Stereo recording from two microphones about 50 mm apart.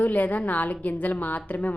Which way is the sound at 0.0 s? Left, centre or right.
Left.